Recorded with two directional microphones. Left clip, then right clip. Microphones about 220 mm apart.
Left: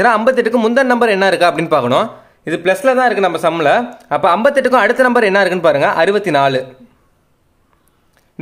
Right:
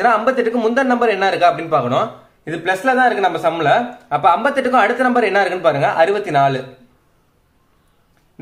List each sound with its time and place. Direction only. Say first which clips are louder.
0.0 s a man's voice: left 3 dB; 55° left (ahead or behind)